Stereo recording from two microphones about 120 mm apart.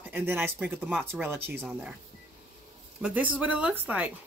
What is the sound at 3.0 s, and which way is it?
Speech, 10° right (ahead or behind).